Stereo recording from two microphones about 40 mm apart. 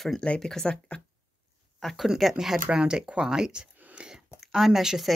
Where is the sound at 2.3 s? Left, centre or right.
Centre.